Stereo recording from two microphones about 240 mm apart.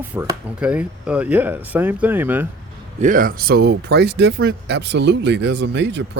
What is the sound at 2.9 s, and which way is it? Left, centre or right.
Speech, right.